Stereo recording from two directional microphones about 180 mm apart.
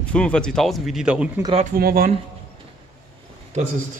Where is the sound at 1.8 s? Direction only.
55° right (ahead or behind).